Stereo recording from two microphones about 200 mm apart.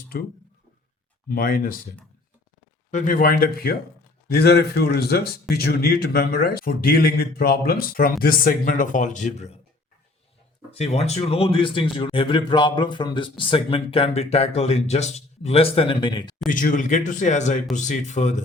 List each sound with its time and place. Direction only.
1.3 s speech: 45° left (ahead or behind)
10.7 s a man's voice: 30° left (ahead or behind)
16.5 s speech: 40° left (ahead or behind)